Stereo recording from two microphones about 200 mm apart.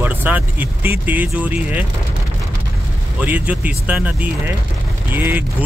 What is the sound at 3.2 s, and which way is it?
Speech, 5° right (ahead or behind).